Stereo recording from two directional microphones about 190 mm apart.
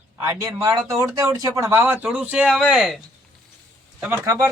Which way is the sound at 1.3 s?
20° right (ahead or behind).